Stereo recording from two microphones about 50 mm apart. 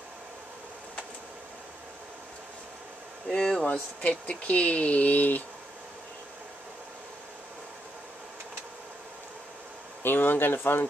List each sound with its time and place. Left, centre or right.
3.3 s speech: centre
3.7 s speech: left
10.0 s speech: left